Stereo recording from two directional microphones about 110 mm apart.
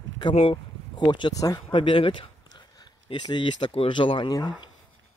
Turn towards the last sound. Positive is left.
turn(degrees=40)  # may be behind; listen again after turning